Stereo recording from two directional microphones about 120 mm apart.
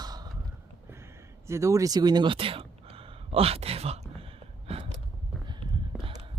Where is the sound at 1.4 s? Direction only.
25° right (ahead or behind); by 4.3 s 60° right (ahead or behind).